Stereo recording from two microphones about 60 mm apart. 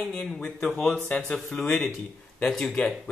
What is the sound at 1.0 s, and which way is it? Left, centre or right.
Speech, left.